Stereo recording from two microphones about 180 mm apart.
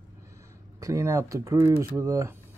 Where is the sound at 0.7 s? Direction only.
15° right (ahead or behind).